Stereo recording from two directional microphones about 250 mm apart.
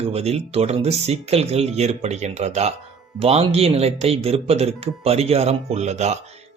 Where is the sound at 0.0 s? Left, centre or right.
Right.